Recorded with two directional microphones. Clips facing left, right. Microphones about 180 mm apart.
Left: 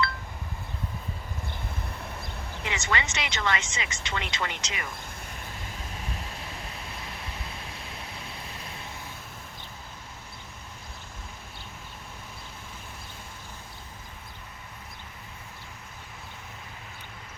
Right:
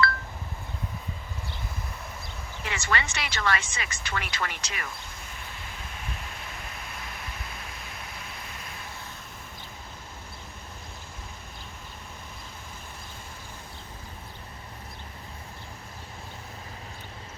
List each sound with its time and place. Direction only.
2.6 s speech: 20° left (ahead or behind)